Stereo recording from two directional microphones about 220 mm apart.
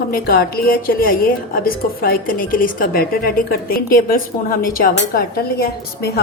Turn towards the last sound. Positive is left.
turn(degrees=45)  # may be behind; listen again after turning